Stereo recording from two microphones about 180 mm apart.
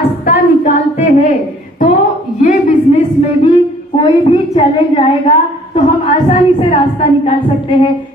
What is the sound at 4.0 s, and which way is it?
A woman's voice, 35° left (ahead or behind).